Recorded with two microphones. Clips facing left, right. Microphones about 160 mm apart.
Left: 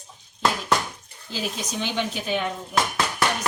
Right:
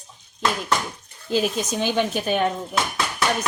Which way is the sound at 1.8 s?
50° right (ahead or behind).